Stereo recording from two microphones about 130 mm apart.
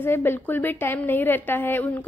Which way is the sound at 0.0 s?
15° left (ahead or behind).